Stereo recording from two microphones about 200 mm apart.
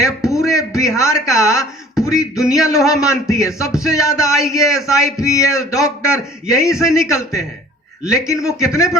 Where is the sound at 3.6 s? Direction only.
Centre (ahead or behind).